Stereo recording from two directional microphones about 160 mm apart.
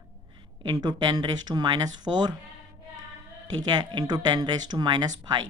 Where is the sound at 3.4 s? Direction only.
25° right (ahead or behind).